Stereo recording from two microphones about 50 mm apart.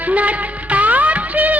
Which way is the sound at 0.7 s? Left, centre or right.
Right.